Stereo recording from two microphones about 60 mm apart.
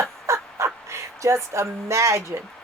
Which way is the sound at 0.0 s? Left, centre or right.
Right.